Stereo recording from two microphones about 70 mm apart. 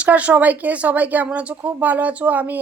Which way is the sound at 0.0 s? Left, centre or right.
Right.